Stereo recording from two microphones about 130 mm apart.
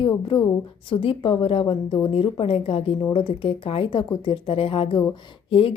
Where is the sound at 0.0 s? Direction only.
40° left (ahead or behind).